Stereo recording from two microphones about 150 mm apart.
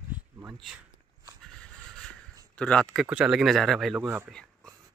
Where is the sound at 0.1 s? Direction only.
10° right (ahead or behind).